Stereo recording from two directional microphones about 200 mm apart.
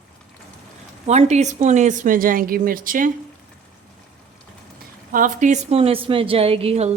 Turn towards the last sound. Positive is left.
turn(degrees=-30)  # may be behind; listen again after turning